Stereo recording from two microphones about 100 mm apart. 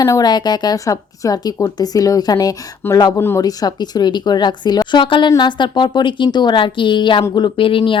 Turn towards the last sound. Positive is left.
turn(degrees=60)  # may be behind; listen again after turning